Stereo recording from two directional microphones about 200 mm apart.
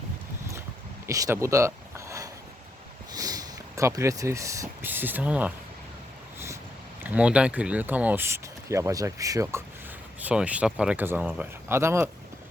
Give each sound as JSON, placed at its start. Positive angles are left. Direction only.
{"t": 1.0, "sound": "a sound", "side_deg": -15}
{"t": 3.1, "sound": "speech", "side_deg": -20}
{"t": 7.0, "sound": "speech", "side_deg": -5}